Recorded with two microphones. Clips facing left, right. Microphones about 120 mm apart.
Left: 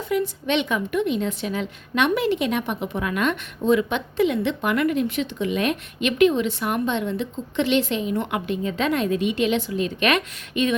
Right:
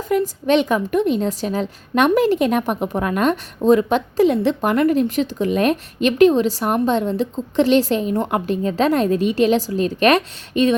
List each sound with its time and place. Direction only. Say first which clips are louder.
0.1 s a woman's voice: right 6 dB; 40° right (ahead or behind)